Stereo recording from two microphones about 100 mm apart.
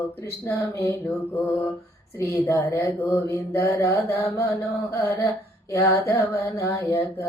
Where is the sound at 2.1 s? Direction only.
25° left (ahead or behind).